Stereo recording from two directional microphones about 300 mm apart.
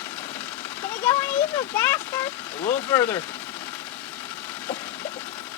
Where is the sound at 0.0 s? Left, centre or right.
Centre.